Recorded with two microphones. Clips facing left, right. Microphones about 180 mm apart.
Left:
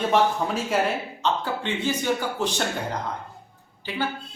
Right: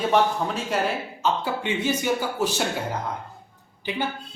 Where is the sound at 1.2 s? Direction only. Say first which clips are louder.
Right 1 dB; 10° right (ahead or behind).